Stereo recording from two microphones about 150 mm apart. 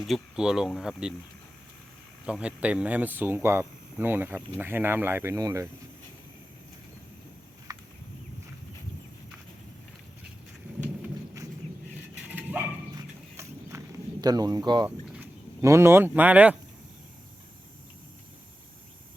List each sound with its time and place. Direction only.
0.0 s speech: 5° right (ahead or behind)
2.2 s speech: 5° right (ahead or behind)
7.7 s a sound: 25° right (ahead or behind)
12.3 s dog: 10° right (ahead or behind)
13.0 s walk: 20° right (ahead or behind)
14.8 s speech: 10° right (ahead or behind)